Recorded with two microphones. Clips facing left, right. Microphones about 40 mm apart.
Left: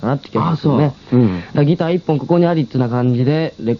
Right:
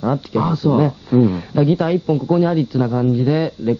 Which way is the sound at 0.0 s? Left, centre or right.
Left.